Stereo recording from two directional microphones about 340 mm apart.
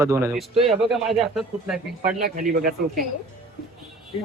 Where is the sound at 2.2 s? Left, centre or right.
Right.